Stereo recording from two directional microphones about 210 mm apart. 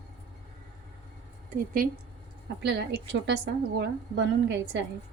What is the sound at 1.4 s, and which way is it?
Speech, 40° right (ahead or behind).